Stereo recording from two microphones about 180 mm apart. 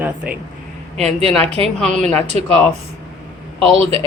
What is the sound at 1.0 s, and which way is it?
Speech, 35° right (ahead or behind).